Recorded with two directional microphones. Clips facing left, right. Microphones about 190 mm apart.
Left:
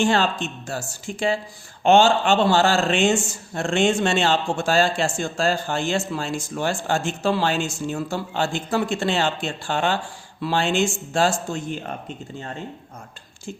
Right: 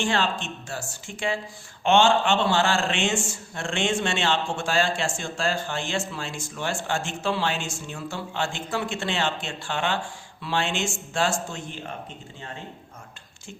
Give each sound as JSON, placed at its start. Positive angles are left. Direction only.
{"t": 0.0, "sound": "speech", "side_deg": 40}